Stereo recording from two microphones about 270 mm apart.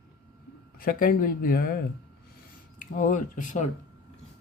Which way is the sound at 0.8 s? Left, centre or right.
Left.